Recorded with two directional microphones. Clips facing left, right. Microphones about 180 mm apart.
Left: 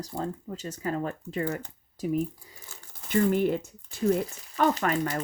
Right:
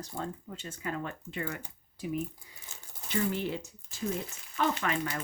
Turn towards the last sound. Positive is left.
turn(degrees=45)  # may be behind; listen again after turning